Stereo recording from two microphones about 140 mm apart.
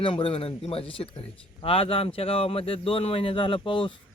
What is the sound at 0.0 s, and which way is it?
Speech, 40° left (ahead or behind).